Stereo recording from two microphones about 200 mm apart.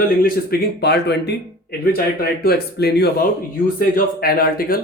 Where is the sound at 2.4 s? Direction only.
50° left (ahead or behind).